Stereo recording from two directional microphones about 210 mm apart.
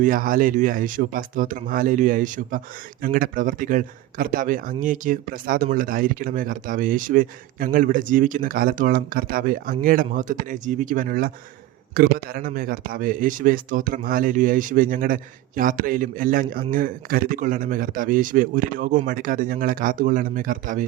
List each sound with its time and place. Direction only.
0.0 s speech: 40° right (ahead or behind)